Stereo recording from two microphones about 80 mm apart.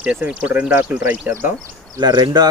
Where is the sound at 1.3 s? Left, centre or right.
Right.